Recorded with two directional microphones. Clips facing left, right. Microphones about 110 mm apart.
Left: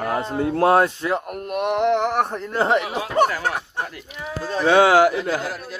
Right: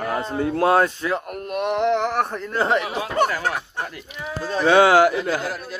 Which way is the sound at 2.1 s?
25° left (ahead or behind).